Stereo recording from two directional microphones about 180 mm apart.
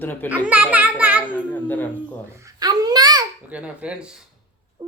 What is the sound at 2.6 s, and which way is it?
Babbling, 20° right (ahead or behind).